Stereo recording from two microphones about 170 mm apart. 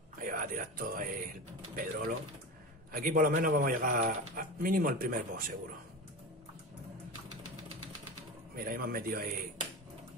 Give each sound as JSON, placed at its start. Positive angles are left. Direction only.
{"t": 0.2, "sound": "speech", "side_deg": -50}
{"t": 8.5, "sound": "speech", "side_deg": -60}